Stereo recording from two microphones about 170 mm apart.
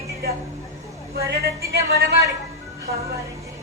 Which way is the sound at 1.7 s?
70° right (ahead or behind).